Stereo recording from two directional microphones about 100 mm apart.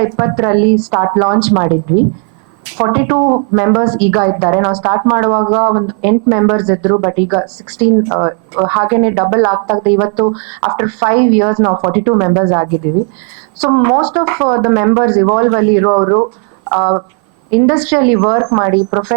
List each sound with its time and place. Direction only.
0.0 s speech: 15° right (ahead or behind)